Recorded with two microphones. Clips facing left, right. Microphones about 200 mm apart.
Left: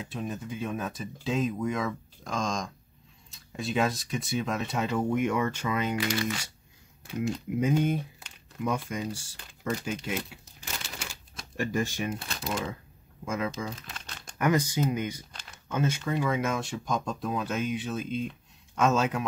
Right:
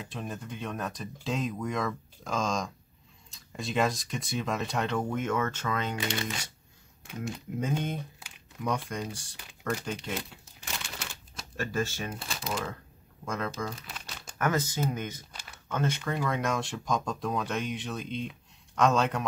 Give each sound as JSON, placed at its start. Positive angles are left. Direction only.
{"t": 0.1, "sound": "speech", "side_deg": 0}
{"t": 7.2, "sound": "speech", "side_deg": 10}
{"t": 9.7, "sound": "crumpling", "side_deg": 5}
{"t": 11.5, "sound": "speech", "side_deg": 15}
{"t": 13.2, "sound": "speech", "side_deg": 10}
{"t": 13.8, "sound": "crumpling", "side_deg": -5}
{"t": 14.4, "sound": "speech", "side_deg": 15}